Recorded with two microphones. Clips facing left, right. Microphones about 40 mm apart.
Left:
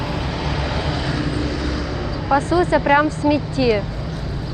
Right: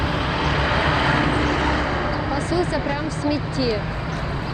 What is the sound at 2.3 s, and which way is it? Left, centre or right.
Speech, left.